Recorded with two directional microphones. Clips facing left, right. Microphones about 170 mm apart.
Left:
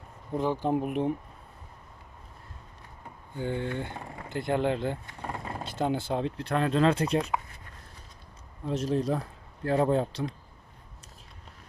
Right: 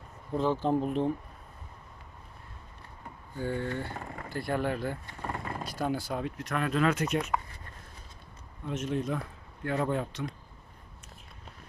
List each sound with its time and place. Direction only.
0.3 s speech: 15° left (ahead or behind)
3.3 s speech: 20° left (ahead or behind)
8.6 s speech: 35° left (ahead or behind)